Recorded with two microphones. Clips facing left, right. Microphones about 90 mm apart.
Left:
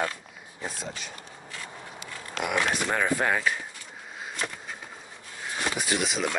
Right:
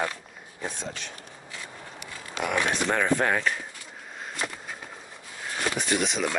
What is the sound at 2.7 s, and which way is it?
Speech, 5° left (ahead or behind).